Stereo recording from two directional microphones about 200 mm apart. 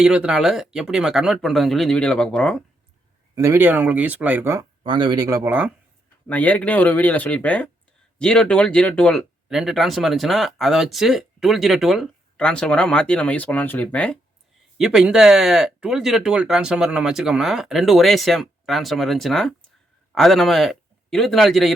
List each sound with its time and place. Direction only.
0.0 s speech: 5° right (ahead or behind)
3.3 s speech: 15° right (ahead or behind)
4.8 s speech: 20° right (ahead or behind)
6.2 s speech: 10° left (ahead or behind)
14.8 s a man's voice: 5° right (ahead or behind)